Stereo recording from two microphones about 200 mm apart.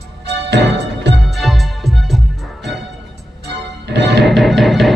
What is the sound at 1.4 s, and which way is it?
Music, centre (ahead or behind).